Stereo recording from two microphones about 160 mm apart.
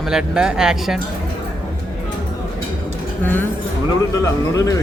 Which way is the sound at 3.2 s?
10° left (ahead or behind).